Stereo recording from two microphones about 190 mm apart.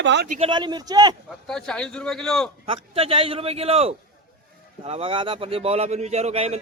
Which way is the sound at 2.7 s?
30° right (ahead or behind).